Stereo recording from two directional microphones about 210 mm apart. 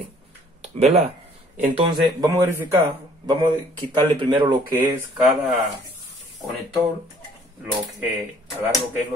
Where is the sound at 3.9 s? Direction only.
25° right (ahead or behind).